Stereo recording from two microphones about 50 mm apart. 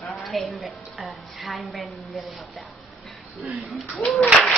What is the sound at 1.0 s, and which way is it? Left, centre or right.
Speech, centre.